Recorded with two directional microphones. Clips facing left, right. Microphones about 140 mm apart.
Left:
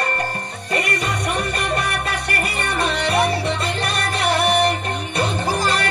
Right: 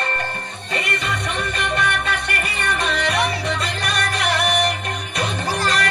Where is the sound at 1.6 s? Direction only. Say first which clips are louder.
Even; 35° left (ahead or behind).